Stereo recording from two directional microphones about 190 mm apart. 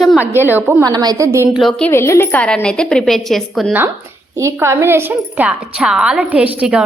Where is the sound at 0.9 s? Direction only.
20° right (ahead or behind).